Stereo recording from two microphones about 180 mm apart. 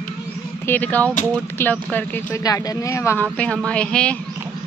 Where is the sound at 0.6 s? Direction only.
10° left (ahead or behind).